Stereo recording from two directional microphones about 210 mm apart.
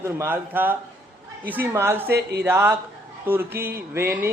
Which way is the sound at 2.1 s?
50° right (ahead or behind).